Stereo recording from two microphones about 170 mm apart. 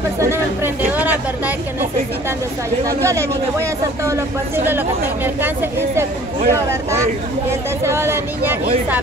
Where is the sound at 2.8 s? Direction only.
15° right (ahead or behind).